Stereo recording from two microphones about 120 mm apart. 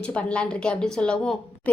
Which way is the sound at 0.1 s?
10° left (ahead or behind).